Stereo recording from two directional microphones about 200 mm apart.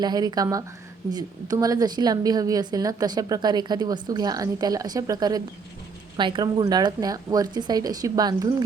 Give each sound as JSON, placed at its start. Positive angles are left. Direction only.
{"t": 0.0, "sound": "a woman's voice", "side_deg": -20}